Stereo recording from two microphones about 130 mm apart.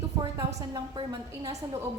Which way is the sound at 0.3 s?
30° right (ahead or behind).